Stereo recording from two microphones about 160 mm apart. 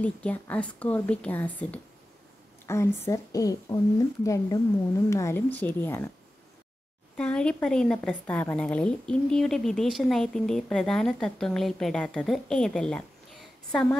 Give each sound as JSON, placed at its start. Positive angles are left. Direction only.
{"t": 0.0, "sound": "speech", "side_deg": 10}
{"t": 7.2, "sound": "a woman's voice", "side_deg": 5}